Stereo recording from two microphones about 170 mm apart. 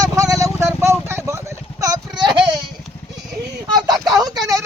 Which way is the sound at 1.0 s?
15° right (ahead or behind).